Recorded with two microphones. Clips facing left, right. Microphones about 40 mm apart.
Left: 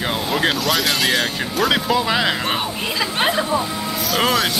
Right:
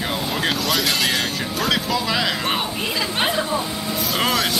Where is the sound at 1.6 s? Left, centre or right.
Left.